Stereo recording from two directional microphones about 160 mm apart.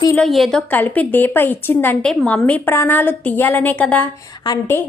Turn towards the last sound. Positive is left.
turn(degrees=25)  # may be behind; listen again after turning